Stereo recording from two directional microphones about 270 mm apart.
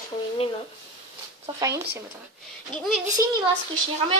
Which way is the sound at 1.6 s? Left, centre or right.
Centre.